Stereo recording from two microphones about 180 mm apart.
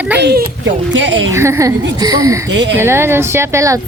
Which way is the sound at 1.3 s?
15° right (ahead or behind).